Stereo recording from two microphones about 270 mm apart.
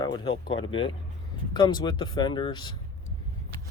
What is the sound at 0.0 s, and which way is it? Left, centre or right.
Speech, centre.